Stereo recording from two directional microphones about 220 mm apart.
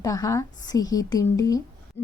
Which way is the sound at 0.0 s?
15° left (ahead or behind).